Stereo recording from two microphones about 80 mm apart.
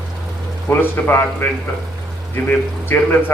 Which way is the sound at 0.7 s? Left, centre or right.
Left.